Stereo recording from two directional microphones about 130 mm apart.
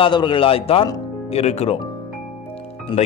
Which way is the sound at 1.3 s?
55° left (ahead or behind).